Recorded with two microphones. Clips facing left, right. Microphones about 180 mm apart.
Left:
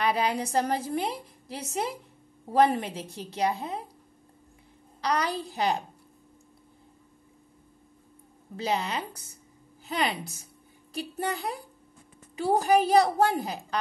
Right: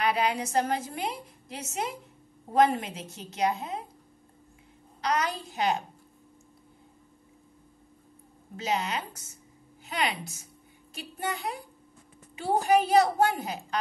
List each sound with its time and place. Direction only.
0.0 s a woman's voice: 35° left (ahead or behind)
5.0 s a woman's voice: 35° left (ahead or behind)
8.5 s a woman's voice: 35° left (ahead or behind)